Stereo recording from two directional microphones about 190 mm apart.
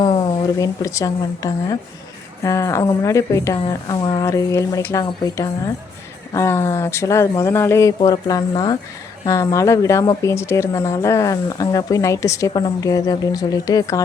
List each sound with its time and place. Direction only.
0.0 s a woman's voice: 25° left (ahead or behind)